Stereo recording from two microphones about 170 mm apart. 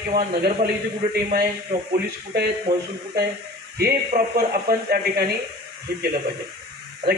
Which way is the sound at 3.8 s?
65° right (ahead or behind).